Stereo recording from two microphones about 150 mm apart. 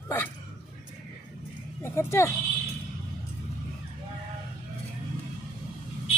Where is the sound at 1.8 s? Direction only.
20° left (ahead or behind).